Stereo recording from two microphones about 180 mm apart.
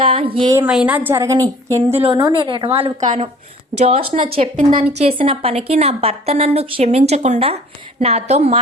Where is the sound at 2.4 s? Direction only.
30° right (ahead or behind).